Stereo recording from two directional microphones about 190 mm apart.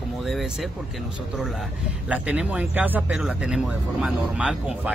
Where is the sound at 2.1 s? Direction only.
5° right (ahead or behind).